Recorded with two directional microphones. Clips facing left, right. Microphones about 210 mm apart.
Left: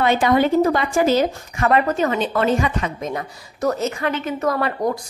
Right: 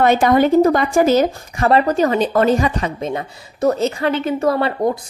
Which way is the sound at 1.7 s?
35° right (ahead or behind).